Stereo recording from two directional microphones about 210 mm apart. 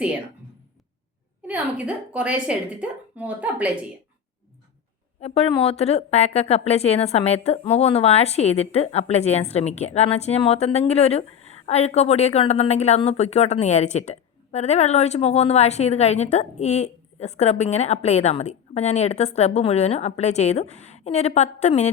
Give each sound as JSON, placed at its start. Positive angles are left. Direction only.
{"t": 1.4, "sound": "a woman's voice", "side_deg": -5}
{"t": 5.2, "sound": "a woman's voice", "side_deg": 30}